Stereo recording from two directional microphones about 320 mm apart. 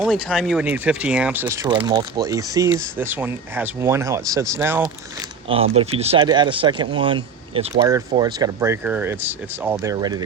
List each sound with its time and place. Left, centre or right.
0.0 s speech: centre
5.5 s speech: centre